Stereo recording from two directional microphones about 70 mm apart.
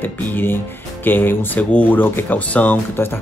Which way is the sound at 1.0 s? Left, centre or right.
Left.